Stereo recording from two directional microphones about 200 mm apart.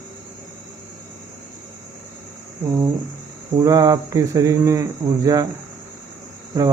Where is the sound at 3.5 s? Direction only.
20° right (ahead or behind).